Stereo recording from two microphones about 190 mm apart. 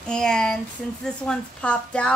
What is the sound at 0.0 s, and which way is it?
Speech, 5° left (ahead or behind).